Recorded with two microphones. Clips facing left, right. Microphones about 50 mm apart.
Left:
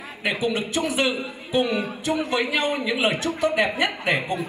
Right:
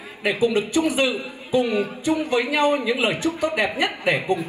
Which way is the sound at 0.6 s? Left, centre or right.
Left.